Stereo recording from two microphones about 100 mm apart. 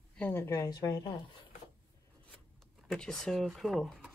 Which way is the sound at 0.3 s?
30° left (ahead or behind).